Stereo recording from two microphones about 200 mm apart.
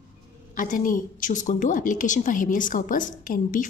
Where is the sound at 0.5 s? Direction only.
40° left (ahead or behind).